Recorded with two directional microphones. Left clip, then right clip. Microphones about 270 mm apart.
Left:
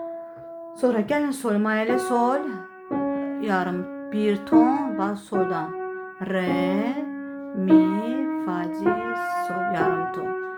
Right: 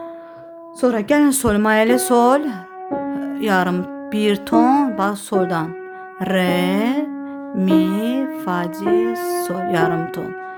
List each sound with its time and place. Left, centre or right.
0.8 s music: right
3.2 s speech: right
6.1 s music: right